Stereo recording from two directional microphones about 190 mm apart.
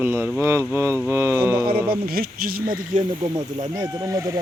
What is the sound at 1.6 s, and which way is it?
Speech, 50° right (ahead or behind).